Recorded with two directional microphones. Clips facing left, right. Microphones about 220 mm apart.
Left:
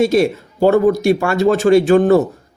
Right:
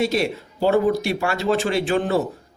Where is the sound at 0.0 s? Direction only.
50° left (ahead or behind).